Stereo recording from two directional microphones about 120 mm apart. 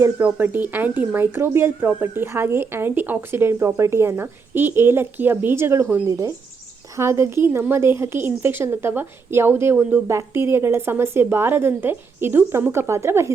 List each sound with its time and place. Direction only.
0.0 s a woman's voice: 15° right (ahead or behind)